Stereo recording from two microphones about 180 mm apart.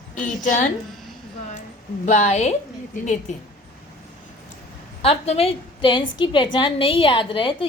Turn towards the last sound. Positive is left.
turn(degrees=30)  # may be behind; listen again after turning